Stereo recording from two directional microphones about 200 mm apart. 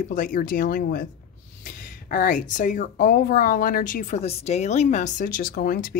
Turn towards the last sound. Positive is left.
turn(degrees=45)  # may be behind; listen again after turning